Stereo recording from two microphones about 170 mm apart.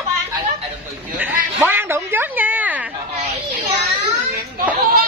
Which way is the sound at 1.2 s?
10° right (ahead or behind).